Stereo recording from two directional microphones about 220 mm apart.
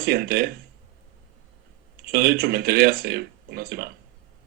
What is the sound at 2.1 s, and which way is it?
Speech, 45° right (ahead or behind).